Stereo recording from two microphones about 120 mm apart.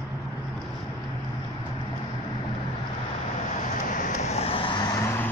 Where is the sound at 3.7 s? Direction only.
90° left; by 5.0 s 40° left (ahead or behind).